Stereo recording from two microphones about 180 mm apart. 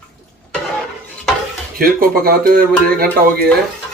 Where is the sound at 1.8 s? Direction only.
55° right (ahead or behind).